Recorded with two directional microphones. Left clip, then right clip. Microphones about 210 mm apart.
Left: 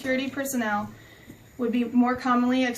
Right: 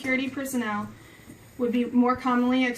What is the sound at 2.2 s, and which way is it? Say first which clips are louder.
Speech: left 1 dB; 15° left (ahead or behind).